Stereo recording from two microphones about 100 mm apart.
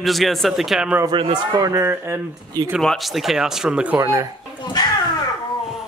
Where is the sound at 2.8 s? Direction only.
Centre (ahead or behind).